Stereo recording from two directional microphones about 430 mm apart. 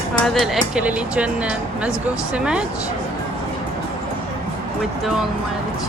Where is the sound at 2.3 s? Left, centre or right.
Centre.